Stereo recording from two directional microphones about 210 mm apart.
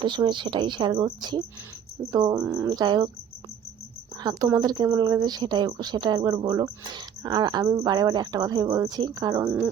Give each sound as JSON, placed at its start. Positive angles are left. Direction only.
{"t": 0.0, "sound": "speech", "side_deg": -20}
{"t": 2.4, "sound": "cricket", "side_deg": -5}
{"t": 2.6, "sound": "speech", "side_deg": -20}
{"t": 4.2, "sound": "speech", "side_deg": -20}